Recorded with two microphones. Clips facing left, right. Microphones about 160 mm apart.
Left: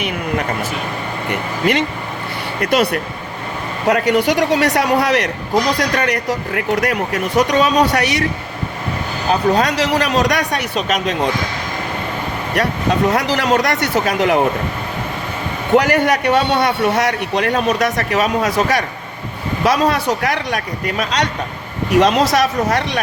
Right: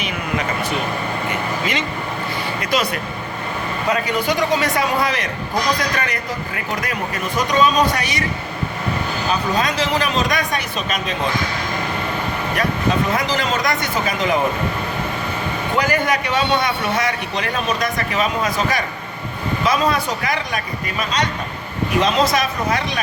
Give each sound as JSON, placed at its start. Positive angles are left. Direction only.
{"t": 1.3, "sound": "a man's voice", "side_deg": 60}
{"t": 9.3, "sound": "a man's voice", "side_deg": 70}
{"t": 12.6, "sound": "a man's voice", "side_deg": 75}
{"t": 15.7, "sound": "a man's voice", "side_deg": 70}